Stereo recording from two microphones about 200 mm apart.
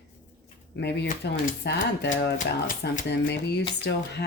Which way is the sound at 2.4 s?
40° left (ahead or behind).